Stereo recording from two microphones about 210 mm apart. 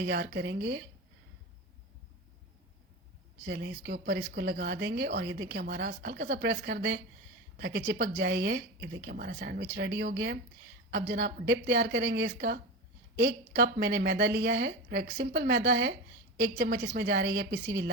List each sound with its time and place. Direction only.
0.0 s speech: 55° right (ahead or behind)
3.4 s speech: 55° right (ahead or behind)